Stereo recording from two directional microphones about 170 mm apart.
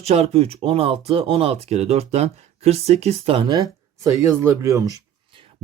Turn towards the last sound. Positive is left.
turn(degrees=-20)  # may be behind; listen again after turning